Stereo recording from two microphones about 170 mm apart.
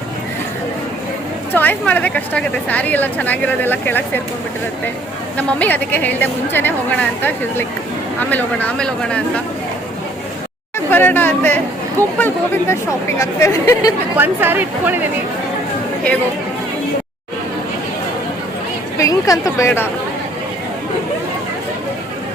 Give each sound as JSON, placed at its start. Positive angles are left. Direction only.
{"t": 1.5, "sound": "a woman's voice", "side_deg": 10}
{"t": 5.4, "sound": "a woman's voice", "side_deg": 10}
{"t": 10.9, "sound": "a woman's voice", "side_deg": 10}
{"t": 14.2, "sound": "speech", "side_deg": -10}
{"t": 18.9, "sound": "a woman's voice", "side_deg": 20}